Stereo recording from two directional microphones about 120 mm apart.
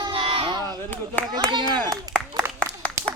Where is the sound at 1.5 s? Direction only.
40° right (ahead or behind).